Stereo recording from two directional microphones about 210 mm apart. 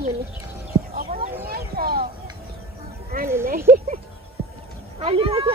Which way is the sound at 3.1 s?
45° right (ahead or behind).